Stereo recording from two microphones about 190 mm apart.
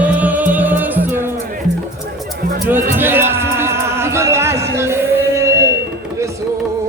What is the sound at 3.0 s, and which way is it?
Music, 10° right (ahead or behind).